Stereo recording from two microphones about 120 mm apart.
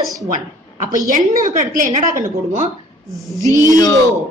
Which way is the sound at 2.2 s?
75° right (ahead or behind).